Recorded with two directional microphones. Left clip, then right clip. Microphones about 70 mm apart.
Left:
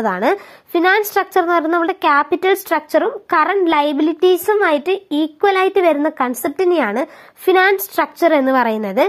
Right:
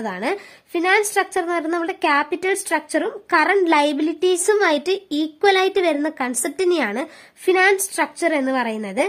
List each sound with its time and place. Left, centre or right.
0.0 s a woman's voice: left
0.8 s speech: centre
4.6 s speech: right
5.4 s speech: centre